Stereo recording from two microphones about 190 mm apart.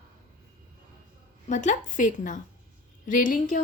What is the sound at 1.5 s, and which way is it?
A woman's voice, 40° left (ahead or behind).